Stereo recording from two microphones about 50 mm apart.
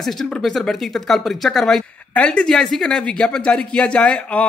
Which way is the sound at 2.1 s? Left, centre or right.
Left.